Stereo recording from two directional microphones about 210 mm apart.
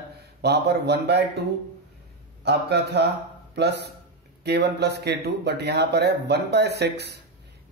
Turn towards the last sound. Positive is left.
turn(degrees=-50)  # may be behind; listen again after turning